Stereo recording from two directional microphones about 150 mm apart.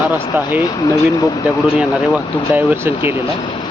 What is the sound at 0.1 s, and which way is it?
Speech, 15° right (ahead or behind).